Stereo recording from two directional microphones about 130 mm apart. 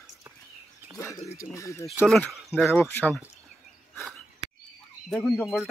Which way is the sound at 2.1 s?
Centre (ahead or behind).